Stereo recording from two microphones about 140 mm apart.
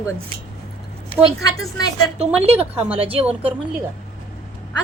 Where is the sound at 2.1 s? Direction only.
45° right (ahead or behind).